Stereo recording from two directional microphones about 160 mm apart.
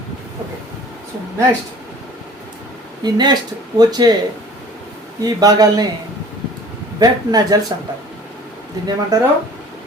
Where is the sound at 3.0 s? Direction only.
25° right (ahead or behind).